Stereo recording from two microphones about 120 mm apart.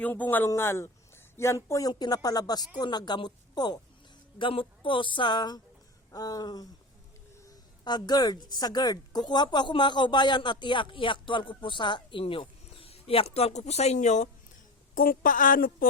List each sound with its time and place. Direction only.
0.0 s a man's voice: 15° left (ahead or behind); by 3.8 s 35° left (ahead or behind)
4.4 s speech: 45° left (ahead or behind); by 14.3 s 80° left
15.3 s speech: 90° left